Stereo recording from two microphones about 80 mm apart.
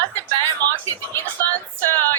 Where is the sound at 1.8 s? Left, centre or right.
Left.